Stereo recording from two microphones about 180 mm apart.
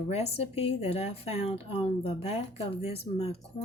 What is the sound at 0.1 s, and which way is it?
A woman's voice, 35° left (ahead or behind).